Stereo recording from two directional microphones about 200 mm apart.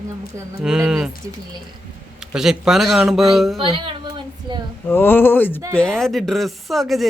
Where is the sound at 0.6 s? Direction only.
5° right (ahead or behind).